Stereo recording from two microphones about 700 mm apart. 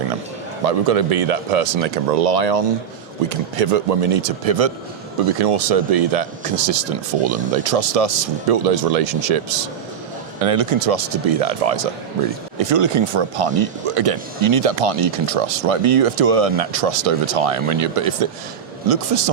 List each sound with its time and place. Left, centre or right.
0.6 s speech: right